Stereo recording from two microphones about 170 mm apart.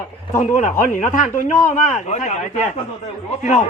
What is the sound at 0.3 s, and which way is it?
Speech, 45° left (ahead or behind).